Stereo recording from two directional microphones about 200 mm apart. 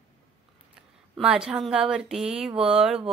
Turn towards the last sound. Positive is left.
turn(degrees=-5)  # may be behind; listen again after turning